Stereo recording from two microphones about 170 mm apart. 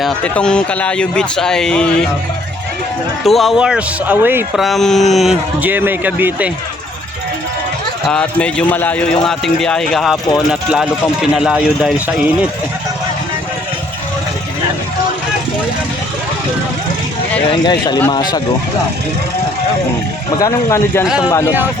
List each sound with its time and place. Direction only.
0.0 s speech: 5° left (ahead or behind)
3.2 s speech: centre (ahead or behind)
4.5 s speech: centre (ahead or behind)
8.0 s speech: 5° left (ahead or behind)
17.5 s a man's voice: 25° left (ahead or behind)
20.3 s speech: 20° left (ahead or behind)